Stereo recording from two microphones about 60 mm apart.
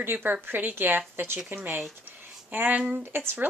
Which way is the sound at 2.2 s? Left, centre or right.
Right.